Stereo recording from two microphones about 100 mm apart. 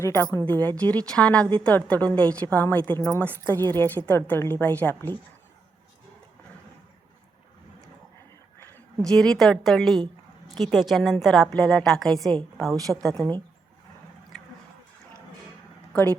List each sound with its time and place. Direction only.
0.0 s a woman's voice: 25° left (ahead or behind)
0.4 s a woman's voice: 15° left (ahead or behind)
9.0 s a woman's voice: 5° left (ahead or behind)
13.1 s speech: 40° right (ahead or behind)
15.9 s speech: 15° left (ahead or behind)